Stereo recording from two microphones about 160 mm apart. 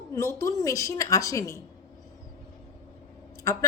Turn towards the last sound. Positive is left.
turn(degrees=20)  # may be behind; listen again after turning